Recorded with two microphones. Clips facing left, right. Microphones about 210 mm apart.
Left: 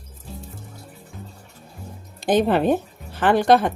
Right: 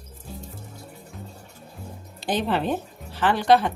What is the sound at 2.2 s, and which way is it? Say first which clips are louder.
Speech: left 6 dB; 50° left (ahead or behind).